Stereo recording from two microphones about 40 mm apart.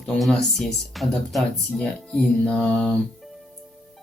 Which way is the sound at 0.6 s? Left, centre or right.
Centre.